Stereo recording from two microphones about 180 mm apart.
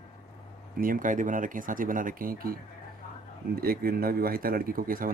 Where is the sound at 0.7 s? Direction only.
50° right (ahead or behind).